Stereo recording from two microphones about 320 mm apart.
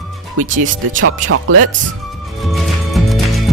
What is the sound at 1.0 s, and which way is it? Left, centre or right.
Speech, right.